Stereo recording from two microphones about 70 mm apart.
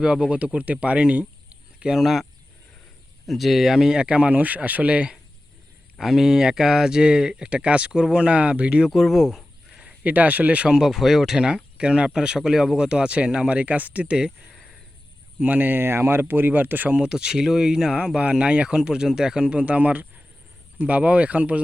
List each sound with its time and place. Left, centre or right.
0.0 s speech: centre
1.8 s speech: centre
3.2 s speech: centre
6.0 s speech: centre
8.9 s speech: centre
9.7 s speech: centre
10.8 s speech: centre
14.5 s a sound: centre
15.4 s speech: right
17.1 s speech: centre